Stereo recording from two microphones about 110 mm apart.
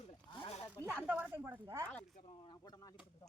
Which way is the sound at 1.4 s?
30° right (ahead or behind).